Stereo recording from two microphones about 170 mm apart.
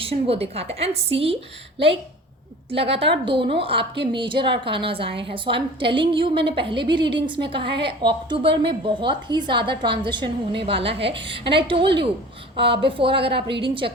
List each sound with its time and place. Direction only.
0.0 s a woman's voice: 35° right (ahead or behind)
2.9 s a woman's voice: 30° right (ahead or behind)
7.6 s a woman's voice: 80° right
8.0 s a woman's voice: 30° right (ahead or behind)